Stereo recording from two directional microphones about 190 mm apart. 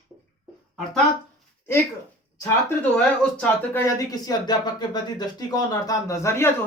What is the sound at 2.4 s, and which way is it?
Speech, 10° left (ahead or behind).